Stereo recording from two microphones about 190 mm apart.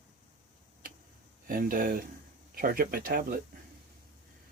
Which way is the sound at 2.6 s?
50° right (ahead or behind).